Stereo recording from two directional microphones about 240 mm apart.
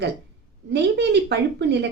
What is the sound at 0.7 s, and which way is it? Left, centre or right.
A woman's voice, right.